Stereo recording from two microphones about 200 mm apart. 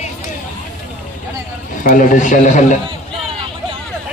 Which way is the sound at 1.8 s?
40° left (ahead or behind).